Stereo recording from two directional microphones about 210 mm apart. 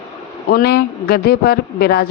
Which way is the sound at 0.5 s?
45° left (ahead or behind).